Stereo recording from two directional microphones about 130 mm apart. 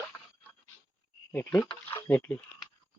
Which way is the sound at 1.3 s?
15° left (ahead or behind).